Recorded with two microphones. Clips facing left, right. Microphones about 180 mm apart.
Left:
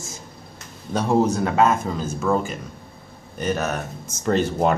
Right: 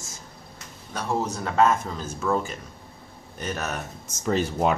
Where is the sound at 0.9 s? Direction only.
20° left (ahead or behind).